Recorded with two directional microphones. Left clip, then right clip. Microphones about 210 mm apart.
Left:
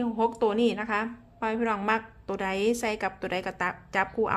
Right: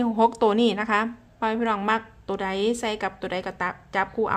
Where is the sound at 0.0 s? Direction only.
15° right (ahead or behind).